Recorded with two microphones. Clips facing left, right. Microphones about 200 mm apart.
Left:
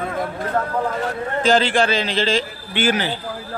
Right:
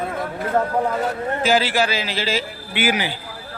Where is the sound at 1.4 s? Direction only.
5° right (ahead or behind).